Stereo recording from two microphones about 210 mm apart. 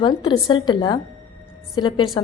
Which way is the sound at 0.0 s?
25° left (ahead or behind).